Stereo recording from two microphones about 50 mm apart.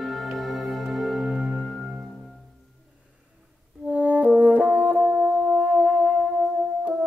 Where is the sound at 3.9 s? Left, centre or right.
Right.